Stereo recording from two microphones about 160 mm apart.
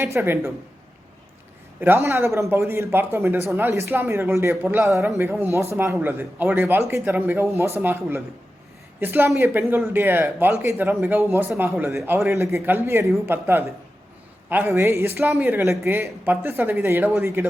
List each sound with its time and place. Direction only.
0.0 s a man's voice: 15° right (ahead or behind)
1.8 s a man's voice: 15° right (ahead or behind)
14.8 s a man's voice: 15° right (ahead or behind)